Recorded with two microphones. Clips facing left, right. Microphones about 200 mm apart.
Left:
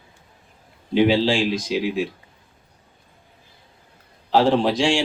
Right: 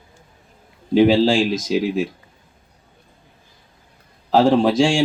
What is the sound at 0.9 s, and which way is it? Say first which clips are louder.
Speech: right 4 dB; 45° right (ahead or behind).